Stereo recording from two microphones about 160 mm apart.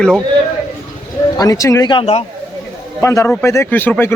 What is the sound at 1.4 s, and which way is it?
Speech, 20° left (ahead or behind).